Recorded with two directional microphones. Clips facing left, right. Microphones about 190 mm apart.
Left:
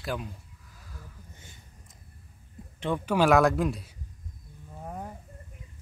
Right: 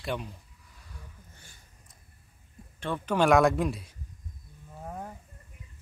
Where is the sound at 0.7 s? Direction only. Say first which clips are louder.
Left 2 dB; centre (ahead or behind).